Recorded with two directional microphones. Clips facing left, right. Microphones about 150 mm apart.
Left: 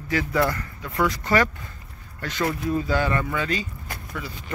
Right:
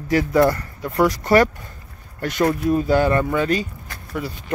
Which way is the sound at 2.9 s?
40° right (ahead or behind).